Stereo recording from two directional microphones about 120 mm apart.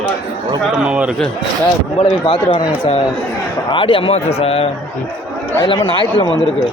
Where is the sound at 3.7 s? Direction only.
45° left (ahead or behind).